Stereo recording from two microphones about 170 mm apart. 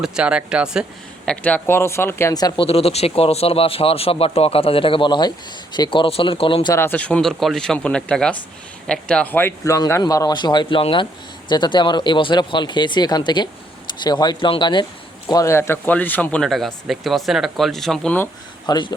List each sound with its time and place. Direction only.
0.0 s speech: 5° right (ahead or behind); by 2.6 s 25° left (ahead or behind)
2.6 s a man's voice: 35° left (ahead or behind)
6.7 s a man's voice: 10° left (ahead or behind)
18.6 s a man's voice: 25° left (ahead or behind)